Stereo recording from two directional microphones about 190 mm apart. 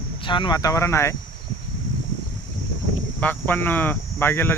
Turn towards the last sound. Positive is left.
turn(degrees=10)  # may be behind; listen again after turning